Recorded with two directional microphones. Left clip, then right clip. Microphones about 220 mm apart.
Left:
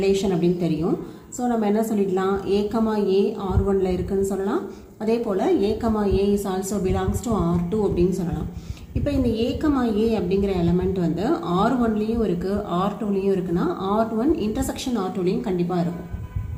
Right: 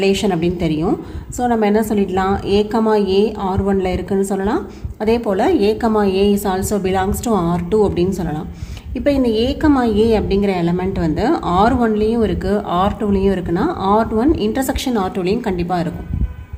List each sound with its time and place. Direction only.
0.0 s a woman's voice: 50° right (ahead or behind)
9.0 s a woman's voice: 50° right (ahead or behind)